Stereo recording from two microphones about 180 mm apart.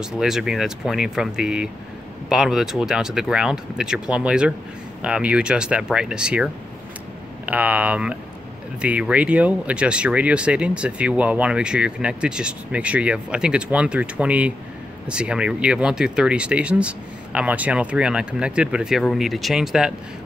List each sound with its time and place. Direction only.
0.0 s speech: 5° right (ahead or behind)